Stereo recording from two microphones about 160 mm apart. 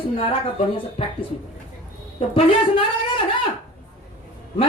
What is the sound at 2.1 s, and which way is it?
Speech, 35° left (ahead or behind).